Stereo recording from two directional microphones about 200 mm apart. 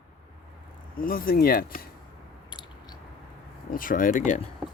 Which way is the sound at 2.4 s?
25° left (ahead or behind).